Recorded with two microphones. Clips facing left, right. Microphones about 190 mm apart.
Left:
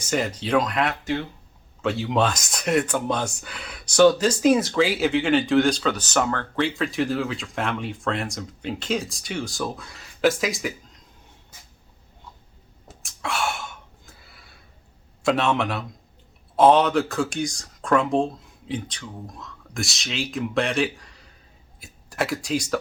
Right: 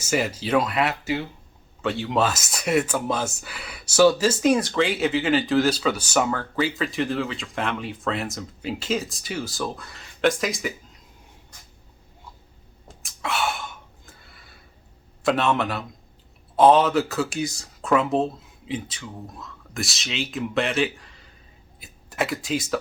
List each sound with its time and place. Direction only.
0.0 s speech: 5° right (ahead or behind)
12.9 s a sound: centre (ahead or behind)
15.2 s speech: centre (ahead or behind)